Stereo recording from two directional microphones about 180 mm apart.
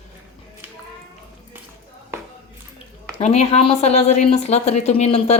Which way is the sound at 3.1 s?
35° left (ahead or behind).